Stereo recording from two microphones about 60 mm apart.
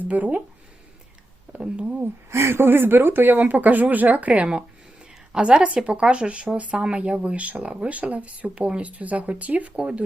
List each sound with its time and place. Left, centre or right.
0.0 s speech: right
1.5 s speech: right
2.3 s a woman's voice: right; by 10.0 s centre